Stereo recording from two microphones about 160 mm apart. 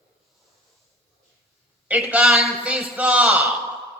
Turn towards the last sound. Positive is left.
turn(degrees=-5)  # may be behind; listen again after turning